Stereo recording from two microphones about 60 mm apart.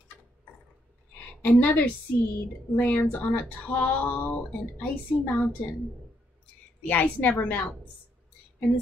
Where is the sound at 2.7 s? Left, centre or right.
Left.